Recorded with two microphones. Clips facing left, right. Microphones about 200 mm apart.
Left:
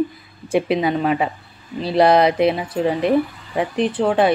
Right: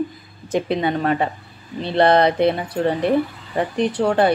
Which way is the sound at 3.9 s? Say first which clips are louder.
Even; 5° left (ahead or behind).